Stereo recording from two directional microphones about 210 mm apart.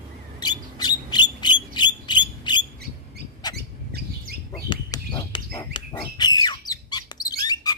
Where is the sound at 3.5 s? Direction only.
50° right (ahead or behind).